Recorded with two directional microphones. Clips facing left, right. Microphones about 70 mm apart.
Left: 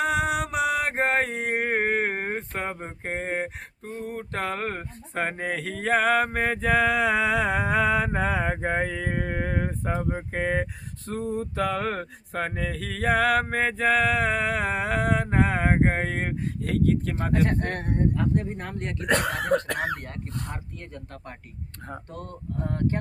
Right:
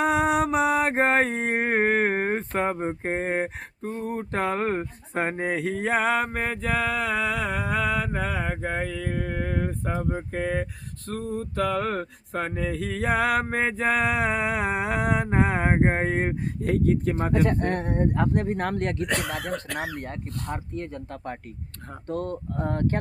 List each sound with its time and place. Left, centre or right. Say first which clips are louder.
0.0 s mantra: right 3 dB; right
2.6 s speech: right 6 dB; right
3.8 s speech: right 4 dB; right
5.4 s mantra: right 3 dB; right; by 10.6 s centre
11.0 s a sound: left 1 dB; centre; by 17.4 s right
18.4 s speech: right 7 dB; right
18.9 s speech: left 3 dB; left
20.0 s speech: right 2 dB; right
22.1 s speech: right 9 dB; right